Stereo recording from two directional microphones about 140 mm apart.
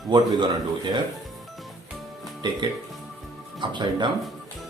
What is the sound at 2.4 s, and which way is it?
Speech, 30° right (ahead or behind).